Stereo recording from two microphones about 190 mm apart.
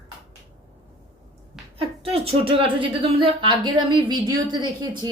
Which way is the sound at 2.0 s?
30° right (ahead or behind).